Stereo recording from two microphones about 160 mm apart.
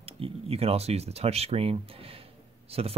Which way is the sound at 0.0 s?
40° right (ahead or behind).